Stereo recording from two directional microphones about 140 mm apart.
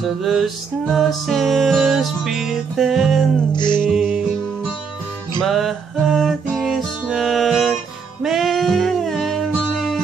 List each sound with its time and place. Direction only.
0.0 s music: centre (ahead or behind)
3.5 s music: 30° left (ahead or behind)
3.8 s music: centre (ahead or behind)
5.4 s music: centre (ahead or behind)